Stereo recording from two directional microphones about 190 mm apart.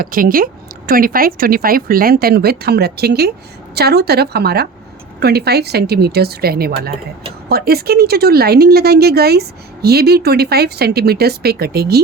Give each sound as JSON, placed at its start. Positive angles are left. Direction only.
{"t": 0.0, "sound": "speech", "side_deg": -50}